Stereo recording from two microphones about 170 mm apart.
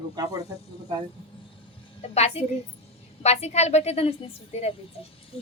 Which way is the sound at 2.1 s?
40° left (ahead or behind).